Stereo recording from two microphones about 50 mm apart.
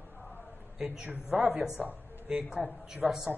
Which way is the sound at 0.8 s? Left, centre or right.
Centre.